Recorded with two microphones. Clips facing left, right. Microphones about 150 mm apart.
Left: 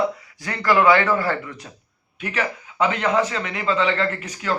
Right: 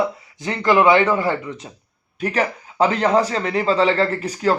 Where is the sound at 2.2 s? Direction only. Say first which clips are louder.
Right 5 dB; 35° right (ahead or behind).